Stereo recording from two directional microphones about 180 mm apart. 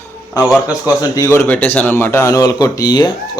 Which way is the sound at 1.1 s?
15° left (ahead or behind).